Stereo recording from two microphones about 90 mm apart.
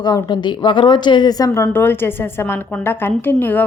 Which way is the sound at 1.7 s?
25° left (ahead or behind).